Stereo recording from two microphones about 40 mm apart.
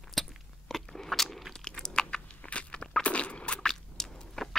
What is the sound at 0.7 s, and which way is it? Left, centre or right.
Biting, centre.